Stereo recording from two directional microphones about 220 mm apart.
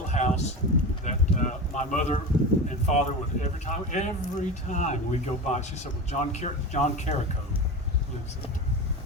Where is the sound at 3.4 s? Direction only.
30° left (ahead or behind).